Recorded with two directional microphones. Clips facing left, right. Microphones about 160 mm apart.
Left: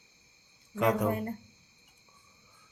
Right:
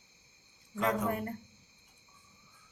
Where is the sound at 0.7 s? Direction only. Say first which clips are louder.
Left 4 dB; 65° left (ahead or behind).